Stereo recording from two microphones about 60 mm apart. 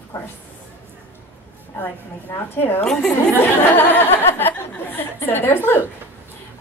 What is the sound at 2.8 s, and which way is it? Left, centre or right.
Speech, centre.